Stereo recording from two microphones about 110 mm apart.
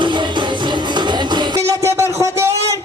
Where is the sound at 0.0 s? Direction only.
45° right (ahead or behind).